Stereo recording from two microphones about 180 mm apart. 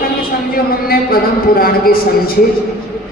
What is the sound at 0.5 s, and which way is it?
Speech, 55° left (ahead or behind).